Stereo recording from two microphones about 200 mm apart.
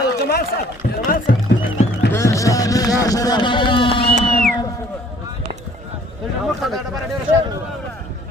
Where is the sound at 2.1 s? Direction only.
15° left (ahead or behind).